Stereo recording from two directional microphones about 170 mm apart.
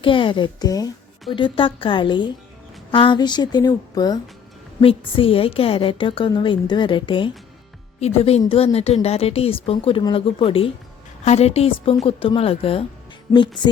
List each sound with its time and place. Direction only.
0.0 s a woman's voice: 30° left (ahead or behind)